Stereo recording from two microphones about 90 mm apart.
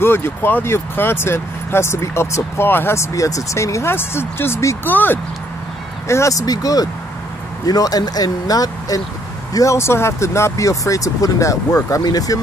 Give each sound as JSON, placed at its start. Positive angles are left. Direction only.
{"t": 0.0, "sound": "speech", "side_deg": 25}
{"t": 6.0, "sound": "speech", "side_deg": 35}